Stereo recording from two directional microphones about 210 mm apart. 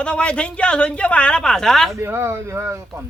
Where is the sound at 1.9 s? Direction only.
10° right (ahead or behind).